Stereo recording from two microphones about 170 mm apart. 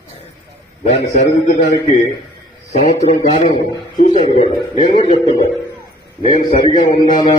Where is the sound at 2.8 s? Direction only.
40° left (ahead or behind).